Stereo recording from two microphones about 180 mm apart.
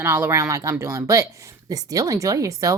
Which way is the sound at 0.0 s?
15° right (ahead or behind).